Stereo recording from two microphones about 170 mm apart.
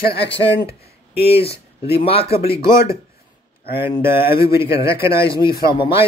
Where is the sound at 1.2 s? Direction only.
35° left (ahead or behind).